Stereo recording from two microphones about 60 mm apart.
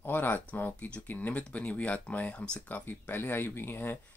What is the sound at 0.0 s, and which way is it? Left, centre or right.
Speech, left.